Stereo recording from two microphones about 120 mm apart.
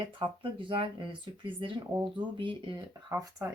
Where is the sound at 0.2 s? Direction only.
45° right (ahead or behind).